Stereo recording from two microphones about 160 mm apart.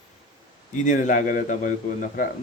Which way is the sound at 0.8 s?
50° left (ahead or behind).